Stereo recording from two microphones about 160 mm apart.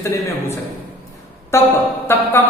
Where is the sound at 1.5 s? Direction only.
15° left (ahead or behind).